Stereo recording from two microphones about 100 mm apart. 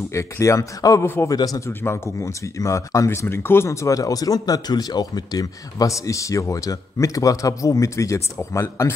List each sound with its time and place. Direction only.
0.1 s speech: 30° left (ahead or behind)
1.3 s speech: 40° left (ahead or behind)
1.7 s speech: 25° left (ahead or behind)